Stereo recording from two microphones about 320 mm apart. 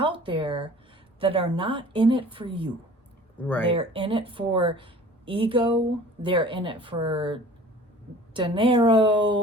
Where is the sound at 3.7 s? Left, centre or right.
Centre.